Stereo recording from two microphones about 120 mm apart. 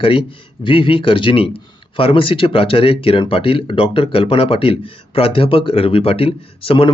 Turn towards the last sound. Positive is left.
turn(degrees=45)  # may be behind; listen again after turning